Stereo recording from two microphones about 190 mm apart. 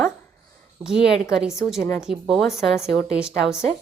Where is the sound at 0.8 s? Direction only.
Centre (ahead or behind).